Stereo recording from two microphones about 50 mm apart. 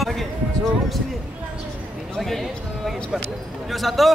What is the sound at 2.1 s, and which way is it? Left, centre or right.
Speech, centre.